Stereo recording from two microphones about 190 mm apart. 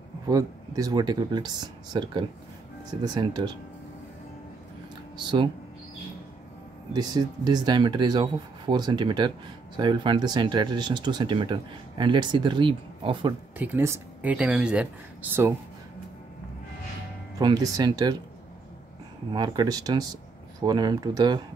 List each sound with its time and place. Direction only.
0.3 s speech: 20° right (ahead or behind)
5.1 s speech: 25° right (ahead or behind)
6.9 s speech: 20° right (ahead or behind)
13.6 s speech: 15° right (ahead or behind)
17.4 s speech: 20° right (ahead or behind)
19.3 s speech: 20° right (ahead or behind)